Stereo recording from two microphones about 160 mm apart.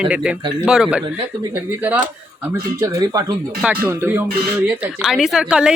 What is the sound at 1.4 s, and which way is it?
Speech, 15° right (ahead or behind).